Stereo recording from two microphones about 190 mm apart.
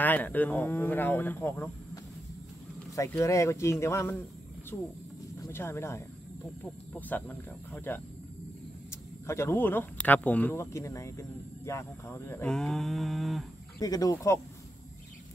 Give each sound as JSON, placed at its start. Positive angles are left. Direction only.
{"t": 0.0, "sound": "speech", "side_deg": 10}
{"t": 3.0, "sound": "speech", "side_deg": 15}
{"t": 5.4, "sound": "speech", "side_deg": 15}
{"t": 9.2, "sound": "speech", "side_deg": 15}
{"t": 13.7, "sound": "speech", "side_deg": 20}